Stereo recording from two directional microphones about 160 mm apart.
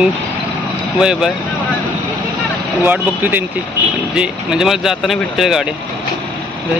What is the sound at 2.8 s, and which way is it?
A man's voice, 10° right (ahead or behind).